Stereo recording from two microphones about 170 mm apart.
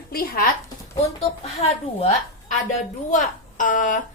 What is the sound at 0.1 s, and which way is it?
Speech, 60° left (ahead or behind).